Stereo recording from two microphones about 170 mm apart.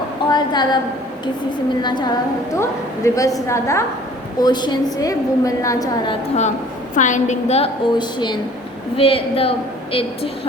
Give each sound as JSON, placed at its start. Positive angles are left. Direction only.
{"t": 0.3, "sound": "a woman's voice", "side_deg": 25}
{"t": 1.8, "sound": "a woman's voice", "side_deg": 25}
{"t": 6.9, "sound": "a woman's voice", "side_deg": 45}